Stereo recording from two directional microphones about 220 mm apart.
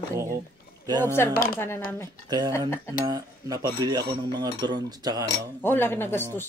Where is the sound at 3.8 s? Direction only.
20° right (ahead or behind).